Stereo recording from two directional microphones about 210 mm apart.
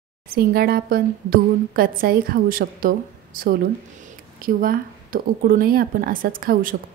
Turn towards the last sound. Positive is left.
turn(degrees=-40)  # may be behind; listen again after turning